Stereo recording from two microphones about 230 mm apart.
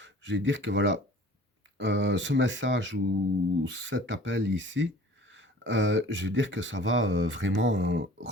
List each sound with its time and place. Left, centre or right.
0.0 s speech: right